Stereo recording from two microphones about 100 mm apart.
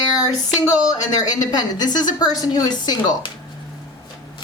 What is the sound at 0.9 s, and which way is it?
A woman's voice, 40° left (ahead or behind).